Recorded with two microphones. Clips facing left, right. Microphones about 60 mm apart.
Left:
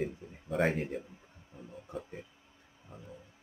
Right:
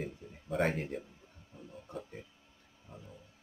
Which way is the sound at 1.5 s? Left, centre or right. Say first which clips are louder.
Left 2 dB; left.